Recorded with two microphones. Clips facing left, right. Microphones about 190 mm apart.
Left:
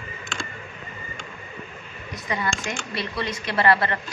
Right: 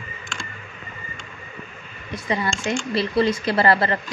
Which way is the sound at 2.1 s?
30° right (ahead or behind).